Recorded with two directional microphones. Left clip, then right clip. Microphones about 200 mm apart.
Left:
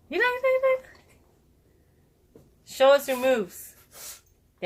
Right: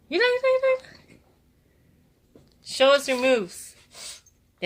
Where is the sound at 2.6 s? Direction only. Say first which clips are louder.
Even; 40° right (ahead or behind).